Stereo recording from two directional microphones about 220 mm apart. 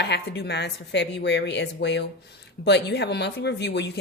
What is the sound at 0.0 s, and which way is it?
A woman's voice, 50° left (ahead or behind).